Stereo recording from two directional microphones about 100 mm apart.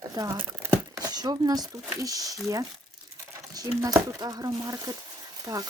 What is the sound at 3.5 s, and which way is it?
Speech, 35° right (ahead or behind).